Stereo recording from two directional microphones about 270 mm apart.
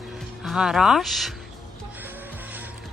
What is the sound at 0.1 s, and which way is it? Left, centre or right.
Speech, centre.